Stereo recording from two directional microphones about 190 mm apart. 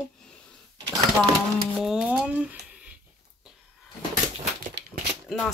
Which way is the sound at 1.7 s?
Centre (ahead or behind).